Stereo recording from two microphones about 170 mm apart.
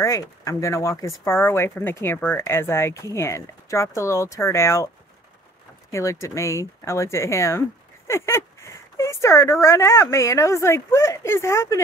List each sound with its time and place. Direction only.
0.0 s speech: 20° left (ahead or behind)
5.9 s speech: 15° left (ahead or behind)